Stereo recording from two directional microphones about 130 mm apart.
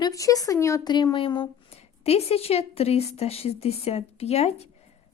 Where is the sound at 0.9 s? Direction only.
35° left (ahead or behind); by 4.7 s 55° left (ahead or behind).